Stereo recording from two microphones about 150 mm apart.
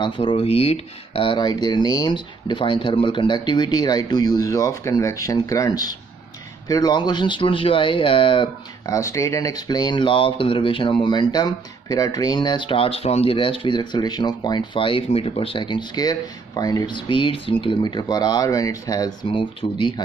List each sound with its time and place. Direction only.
0.0 s speech: 35° left (ahead or behind)
8.8 s speech: 20° left (ahead or behind)